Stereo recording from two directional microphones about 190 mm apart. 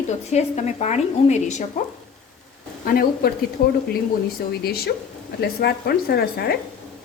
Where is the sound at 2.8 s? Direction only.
55° left (ahead or behind).